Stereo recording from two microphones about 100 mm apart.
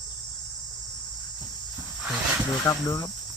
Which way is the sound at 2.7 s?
35° left (ahead or behind).